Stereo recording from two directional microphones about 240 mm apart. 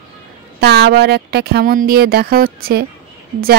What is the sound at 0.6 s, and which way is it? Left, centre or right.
Speech, right.